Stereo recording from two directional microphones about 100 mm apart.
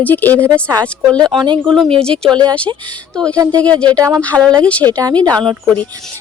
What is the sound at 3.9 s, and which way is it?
Speech, 35° right (ahead or behind).